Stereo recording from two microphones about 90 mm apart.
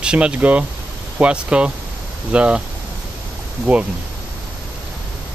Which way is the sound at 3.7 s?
15° right (ahead or behind).